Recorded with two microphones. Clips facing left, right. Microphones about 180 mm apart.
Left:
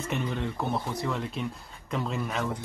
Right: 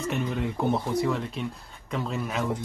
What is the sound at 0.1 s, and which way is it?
Speech, centre (ahead or behind).